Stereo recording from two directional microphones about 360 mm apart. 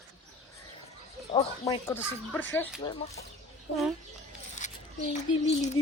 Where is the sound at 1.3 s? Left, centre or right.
Centre.